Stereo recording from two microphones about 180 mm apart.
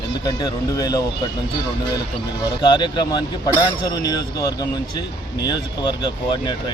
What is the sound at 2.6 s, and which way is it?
Speech, 25° left (ahead or behind).